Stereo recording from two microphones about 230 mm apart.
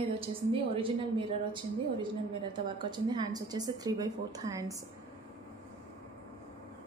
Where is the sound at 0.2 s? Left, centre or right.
Right.